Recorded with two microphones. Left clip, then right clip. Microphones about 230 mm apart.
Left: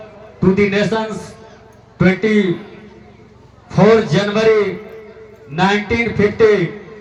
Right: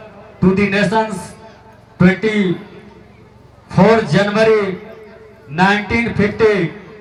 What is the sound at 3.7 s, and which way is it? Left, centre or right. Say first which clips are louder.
Speech: left 1 dB; right.